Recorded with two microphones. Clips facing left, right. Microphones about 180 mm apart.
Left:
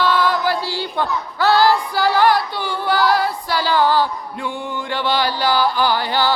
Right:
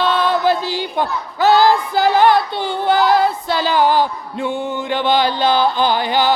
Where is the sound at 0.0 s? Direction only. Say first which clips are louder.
Right 2 dB; 20° right (ahead or behind).